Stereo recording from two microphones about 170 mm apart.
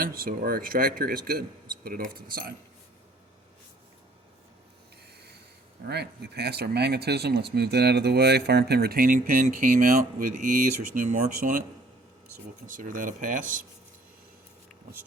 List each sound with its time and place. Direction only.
0.0 s a man's voice: 60° right (ahead or behind)
5.9 s speech: 75° right (ahead or behind); by 11.6 s 50° right (ahead or behind)
12.6 s speech: 50° right (ahead or behind)